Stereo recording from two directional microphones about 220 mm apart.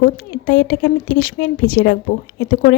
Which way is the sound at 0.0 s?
45° left (ahead or behind).